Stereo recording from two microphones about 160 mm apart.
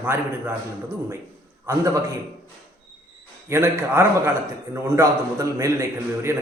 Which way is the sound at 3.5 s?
15° right (ahead or behind).